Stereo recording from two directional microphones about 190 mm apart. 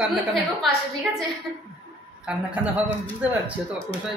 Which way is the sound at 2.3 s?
5° right (ahead or behind).